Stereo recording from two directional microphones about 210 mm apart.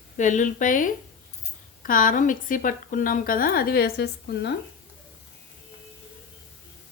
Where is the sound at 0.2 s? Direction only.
35° left (ahead or behind).